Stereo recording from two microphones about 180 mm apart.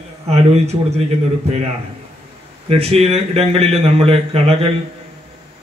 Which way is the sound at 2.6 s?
35° right (ahead or behind).